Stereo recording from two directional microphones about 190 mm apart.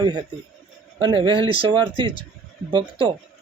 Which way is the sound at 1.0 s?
25° right (ahead or behind).